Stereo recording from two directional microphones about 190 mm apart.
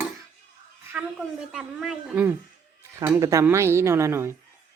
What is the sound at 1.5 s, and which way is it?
A woman's voice, 5° right (ahead or behind).